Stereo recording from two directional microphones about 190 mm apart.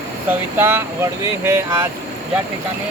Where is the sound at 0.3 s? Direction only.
10° right (ahead or behind).